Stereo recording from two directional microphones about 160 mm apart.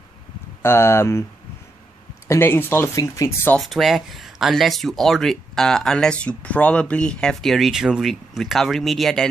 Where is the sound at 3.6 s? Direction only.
Centre (ahead or behind).